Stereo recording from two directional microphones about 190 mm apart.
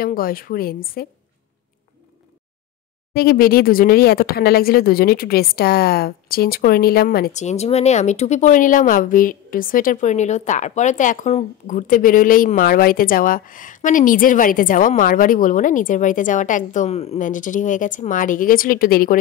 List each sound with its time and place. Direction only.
0.0 s speech: 50° left (ahead or behind)
3.1 s speech: 50° left (ahead or behind)
7.3 s speech: 35° left (ahead or behind)